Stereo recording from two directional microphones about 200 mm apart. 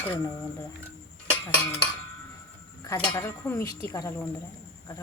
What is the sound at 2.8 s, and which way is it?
Speech, 15° left (ahead or behind).